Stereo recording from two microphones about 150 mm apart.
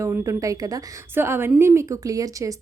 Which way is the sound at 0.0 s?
20° right (ahead or behind).